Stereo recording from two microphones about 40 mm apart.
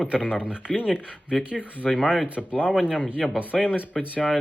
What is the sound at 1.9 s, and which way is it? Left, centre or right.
Speech, centre.